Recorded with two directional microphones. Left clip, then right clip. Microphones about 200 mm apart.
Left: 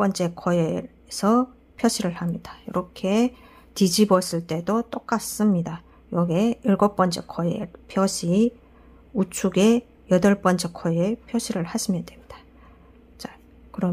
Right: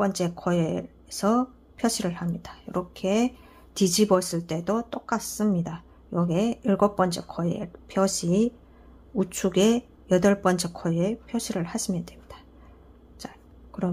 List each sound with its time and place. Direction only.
0.0 s speech: 15° left (ahead or behind)
13.2 s whispering: 15° left (ahead or behind)